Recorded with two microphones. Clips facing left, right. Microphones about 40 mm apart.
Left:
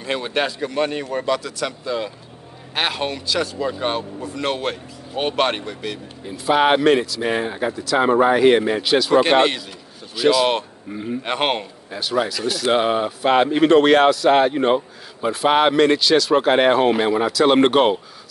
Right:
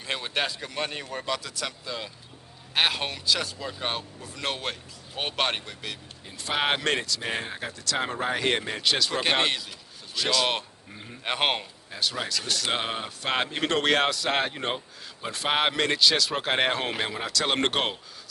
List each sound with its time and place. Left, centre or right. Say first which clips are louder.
0.0 s speech: left 7 dB; centre
11.2 s speech: left 4 dB; centre